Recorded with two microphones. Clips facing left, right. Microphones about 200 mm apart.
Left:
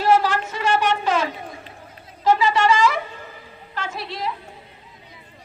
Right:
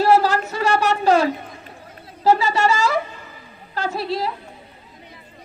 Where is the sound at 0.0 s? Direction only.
35° right (ahead or behind).